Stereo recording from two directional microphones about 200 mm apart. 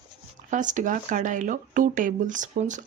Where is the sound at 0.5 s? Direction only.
40° right (ahead or behind).